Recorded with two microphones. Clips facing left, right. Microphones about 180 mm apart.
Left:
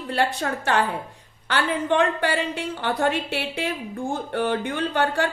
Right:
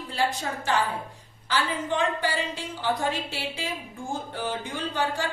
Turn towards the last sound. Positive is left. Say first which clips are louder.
# left 5 dB
turn(degrees=65)  # may be behind; listen again after turning